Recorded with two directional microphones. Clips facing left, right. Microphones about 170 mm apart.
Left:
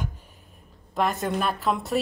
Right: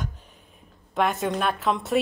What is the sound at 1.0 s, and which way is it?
A woman's voice, centre (ahead or behind).